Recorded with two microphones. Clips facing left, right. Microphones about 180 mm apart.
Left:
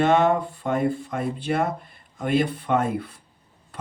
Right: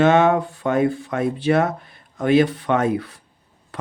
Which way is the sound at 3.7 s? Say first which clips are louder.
Right 5 dB; 80° right.